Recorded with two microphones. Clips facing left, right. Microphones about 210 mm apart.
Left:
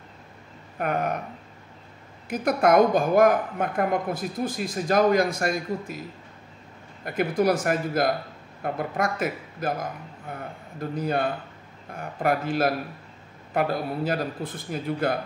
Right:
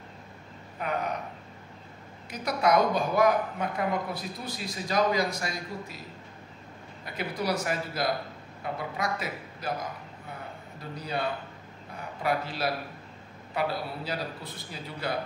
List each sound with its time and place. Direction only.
0.7 s a woman's voice: 55° left (ahead or behind)
2.2 s a woman's voice: 50° left (ahead or behind)
7.1 s a woman's voice: 50° left (ahead or behind)